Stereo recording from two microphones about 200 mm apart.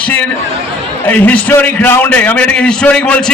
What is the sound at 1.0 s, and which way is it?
A man's voice, 10° left (ahead or behind).